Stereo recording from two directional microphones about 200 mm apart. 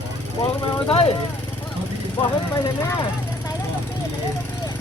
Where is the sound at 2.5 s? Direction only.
15° left (ahead or behind).